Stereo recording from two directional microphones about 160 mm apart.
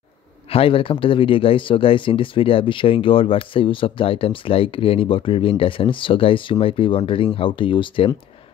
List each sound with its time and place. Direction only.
0.5 s speech: 35° left (ahead or behind)